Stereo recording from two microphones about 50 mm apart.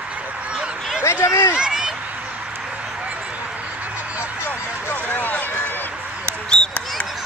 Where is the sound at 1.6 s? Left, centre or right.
Centre.